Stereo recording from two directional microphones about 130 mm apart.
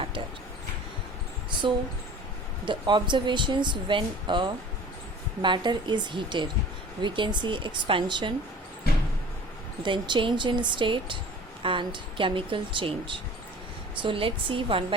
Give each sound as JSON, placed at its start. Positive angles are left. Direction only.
{"t": 2.6, "sound": "speech", "side_deg": -35}
{"t": 9.8, "sound": "speech", "side_deg": -40}